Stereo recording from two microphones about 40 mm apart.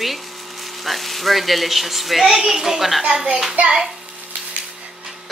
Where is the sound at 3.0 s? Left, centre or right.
Right.